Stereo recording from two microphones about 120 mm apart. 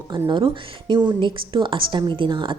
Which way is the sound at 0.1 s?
40° right (ahead or behind).